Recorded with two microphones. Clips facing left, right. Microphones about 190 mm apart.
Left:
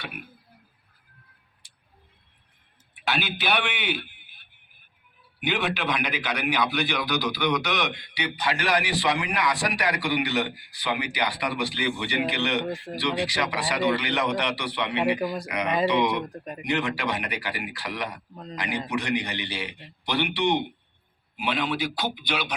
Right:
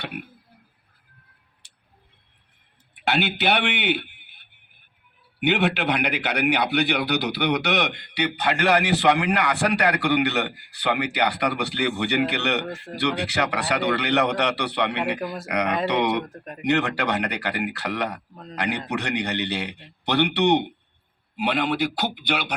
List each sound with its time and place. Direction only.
3.0 s a man's voice: 65° right (ahead or behind)
5.4 s a man's voice: 70° right (ahead or behind)
15.2 s speech: centre (ahead or behind)
15.4 s a man's voice: 70° right (ahead or behind)